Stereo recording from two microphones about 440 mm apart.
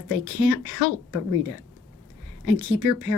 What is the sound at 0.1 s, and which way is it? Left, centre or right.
Speech, left.